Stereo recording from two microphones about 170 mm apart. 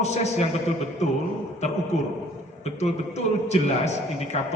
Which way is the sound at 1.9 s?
40° left (ahead or behind).